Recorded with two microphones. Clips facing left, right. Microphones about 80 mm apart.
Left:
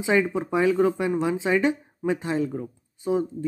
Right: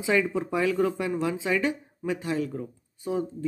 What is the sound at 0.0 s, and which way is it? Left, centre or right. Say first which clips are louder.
Speech: left 2 dB; left.